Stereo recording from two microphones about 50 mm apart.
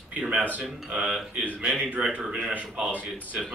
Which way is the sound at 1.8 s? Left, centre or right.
Centre.